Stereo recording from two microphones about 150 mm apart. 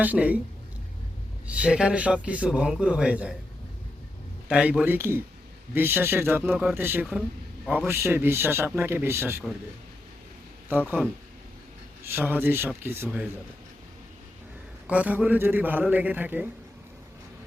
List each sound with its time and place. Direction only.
0.0 s a man's voice: 10° right (ahead or behind)
1.5 s a man's voice: 5° right (ahead or behind)
4.4 s a man's voice: 5° right (ahead or behind)
6.4 s a man's voice: 5° right (ahead or behind)
10.7 s a man's voice: 10° right (ahead or behind)
14.8 s a man's voice: 10° right (ahead or behind)